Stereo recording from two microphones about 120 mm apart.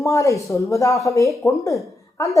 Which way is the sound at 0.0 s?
25° left (ahead or behind).